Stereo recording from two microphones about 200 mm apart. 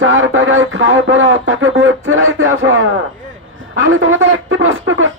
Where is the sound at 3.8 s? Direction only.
80° right.